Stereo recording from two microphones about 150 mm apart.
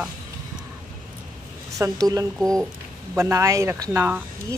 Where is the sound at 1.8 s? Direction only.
20° right (ahead or behind).